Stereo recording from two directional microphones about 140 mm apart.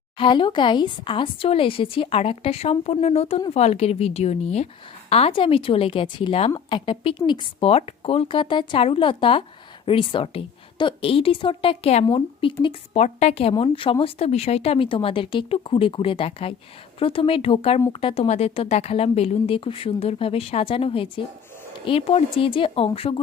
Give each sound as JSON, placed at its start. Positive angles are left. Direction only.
{"t": 0.2, "sound": "a woman's voice", "side_deg": 35}
{"t": 13.0, "sound": "a woman's voice", "side_deg": 50}